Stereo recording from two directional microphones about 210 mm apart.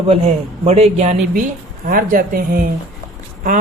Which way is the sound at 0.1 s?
30° right (ahead or behind).